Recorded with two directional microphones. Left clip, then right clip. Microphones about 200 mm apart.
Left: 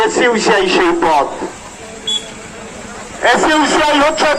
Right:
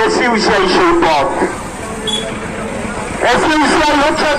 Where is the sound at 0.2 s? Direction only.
20° right (ahead or behind).